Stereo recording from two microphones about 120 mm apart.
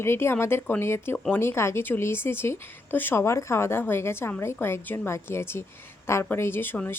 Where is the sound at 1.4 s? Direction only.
20° left (ahead or behind).